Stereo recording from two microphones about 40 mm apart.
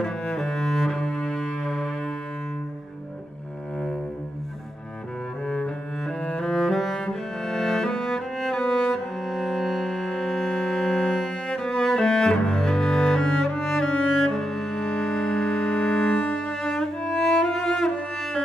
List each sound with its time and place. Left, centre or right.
0.0 s cello: centre
6.4 s music: centre
13.5 s cello: centre
14.9 s cello: left
16.6 s music: centre